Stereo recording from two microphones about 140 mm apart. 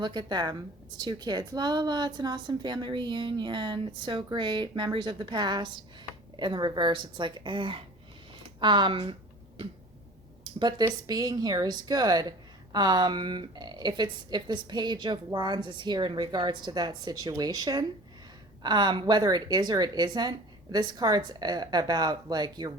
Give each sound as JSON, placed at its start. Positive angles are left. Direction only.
{"t": 0.0, "sound": "a woman's voice", "side_deg": -30}
{"t": 10.4, "sound": "a woman's voice", "side_deg": -30}